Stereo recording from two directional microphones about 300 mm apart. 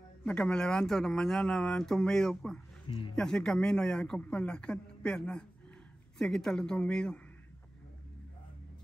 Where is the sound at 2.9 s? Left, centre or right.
Centre.